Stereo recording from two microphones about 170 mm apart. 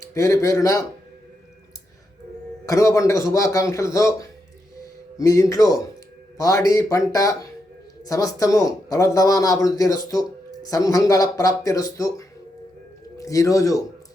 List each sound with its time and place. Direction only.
0.0 s speech: 15° left (ahead or behind)
2.6 s speech: 20° left (ahead or behind)